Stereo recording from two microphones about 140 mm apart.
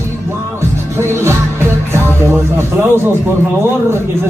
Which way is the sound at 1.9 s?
20° right (ahead or behind).